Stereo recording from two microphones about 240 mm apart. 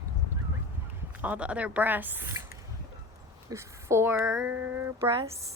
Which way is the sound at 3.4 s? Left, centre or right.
Centre.